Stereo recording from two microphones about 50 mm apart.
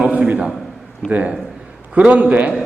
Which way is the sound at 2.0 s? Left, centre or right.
Right.